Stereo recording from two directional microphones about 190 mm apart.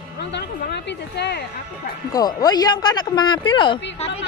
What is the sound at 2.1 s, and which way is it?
Speech, 20° left (ahead or behind).